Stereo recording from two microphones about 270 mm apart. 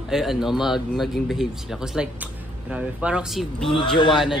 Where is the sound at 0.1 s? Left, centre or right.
Centre.